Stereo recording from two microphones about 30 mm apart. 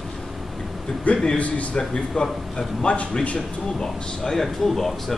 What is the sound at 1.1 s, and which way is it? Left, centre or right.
Speech, left.